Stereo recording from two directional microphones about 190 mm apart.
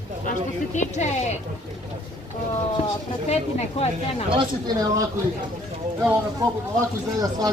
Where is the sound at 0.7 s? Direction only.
35° left (ahead or behind).